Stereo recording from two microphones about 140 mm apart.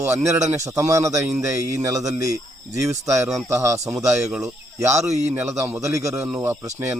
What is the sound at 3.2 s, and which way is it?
Speech, centre (ahead or behind).